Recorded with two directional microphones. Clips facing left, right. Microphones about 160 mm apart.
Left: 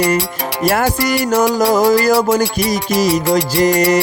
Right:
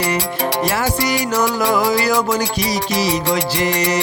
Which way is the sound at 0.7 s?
50° left (ahead or behind).